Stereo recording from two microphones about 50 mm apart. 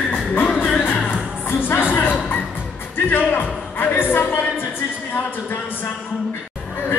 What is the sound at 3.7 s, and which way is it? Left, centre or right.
Music, left.